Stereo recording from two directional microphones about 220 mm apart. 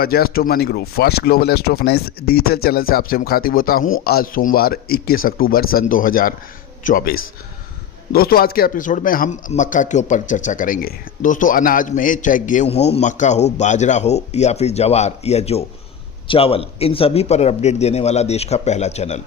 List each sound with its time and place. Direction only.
0.0 s a man's voice: 45° left (ahead or behind)